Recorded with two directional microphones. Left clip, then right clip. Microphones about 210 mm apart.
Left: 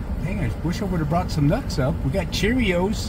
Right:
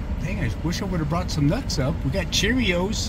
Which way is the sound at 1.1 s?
30° left (ahead or behind).